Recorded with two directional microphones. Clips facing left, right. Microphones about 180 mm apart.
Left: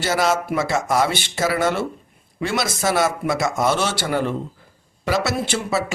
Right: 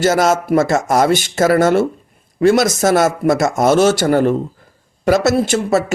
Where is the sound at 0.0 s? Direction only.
45° right (ahead or behind).